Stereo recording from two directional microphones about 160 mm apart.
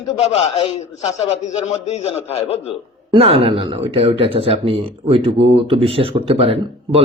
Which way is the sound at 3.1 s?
40° right (ahead or behind).